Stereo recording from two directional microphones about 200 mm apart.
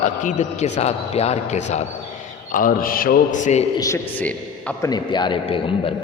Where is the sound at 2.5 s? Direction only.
45° left (ahead or behind).